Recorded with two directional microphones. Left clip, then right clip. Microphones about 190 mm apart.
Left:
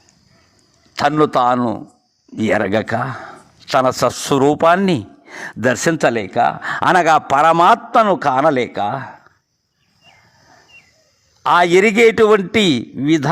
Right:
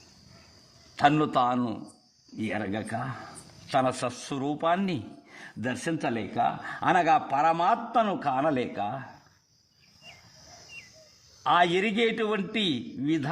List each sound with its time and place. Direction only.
0.9 s a man's voice: 40° left (ahead or behind)
2.3 s speech: 45° left (ahead or behind)
11.4 s speech: 40° left (ahead or behind)